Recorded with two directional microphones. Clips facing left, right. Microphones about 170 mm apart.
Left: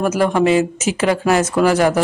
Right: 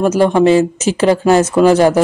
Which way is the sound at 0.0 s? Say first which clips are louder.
Right 5 dB; 25° right (ahead or behind).